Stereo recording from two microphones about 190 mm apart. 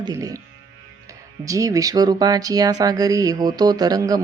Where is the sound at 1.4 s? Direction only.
15° right (ahead or behind).